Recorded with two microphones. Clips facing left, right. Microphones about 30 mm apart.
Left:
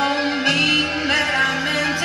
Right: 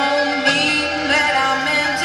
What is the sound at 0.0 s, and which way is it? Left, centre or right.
Music, right.